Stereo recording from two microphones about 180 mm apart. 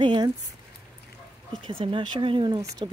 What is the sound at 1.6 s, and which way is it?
Speech, 30° right (ahead or behind).